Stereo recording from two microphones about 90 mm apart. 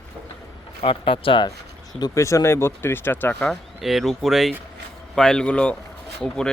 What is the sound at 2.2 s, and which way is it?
Speech, 35° left (ahead or behind).